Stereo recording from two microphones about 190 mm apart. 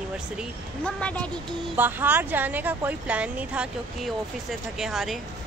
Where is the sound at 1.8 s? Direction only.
10° right (ahead or behind).